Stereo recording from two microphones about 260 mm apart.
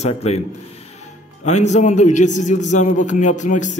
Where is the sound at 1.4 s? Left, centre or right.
Left.